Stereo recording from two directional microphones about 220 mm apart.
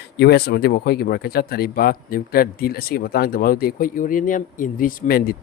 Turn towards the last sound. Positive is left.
turn(degrees=40)  # may be behind; listen again after turning